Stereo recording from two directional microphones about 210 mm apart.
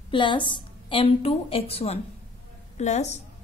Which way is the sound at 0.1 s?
25° left (ahead or behind).